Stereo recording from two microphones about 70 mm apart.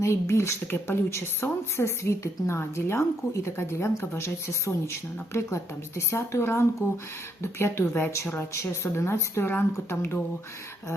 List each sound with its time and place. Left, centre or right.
0.0 s speech: left